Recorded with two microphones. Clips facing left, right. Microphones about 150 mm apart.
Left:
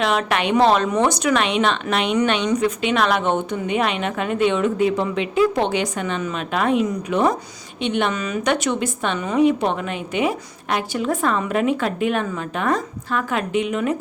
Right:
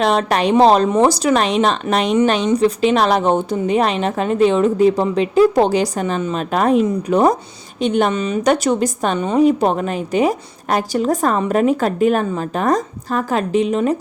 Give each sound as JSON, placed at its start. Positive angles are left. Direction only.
{"t": 0.0, "sound": "a woman's voice", "side_deg": -35}